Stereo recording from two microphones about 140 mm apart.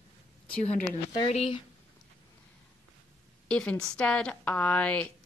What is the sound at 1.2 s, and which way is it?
Speech, 45° left (ahead or behind).